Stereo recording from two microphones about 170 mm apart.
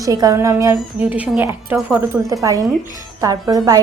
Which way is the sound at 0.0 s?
20° right (ahead or behind).